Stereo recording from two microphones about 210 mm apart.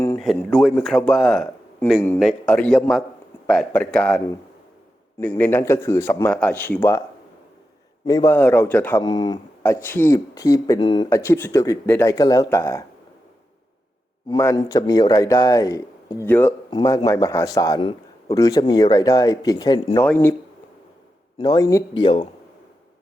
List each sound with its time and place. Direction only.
0.2 s speech: centre (ahead or behind)
5.4 s a man's voice: 10° left (ahead or behind)
8.0 s a man's voice: 15° left (ahead or behind)
9.0 s a man's voice: 20° left (ahead or behind)
14.3 s a man's voice: 15° left (ahead or behind)
20.1 s a man's voice: 10° left (ahead or behind)
21.3 s a man's voice: 20° left (ahead or behind)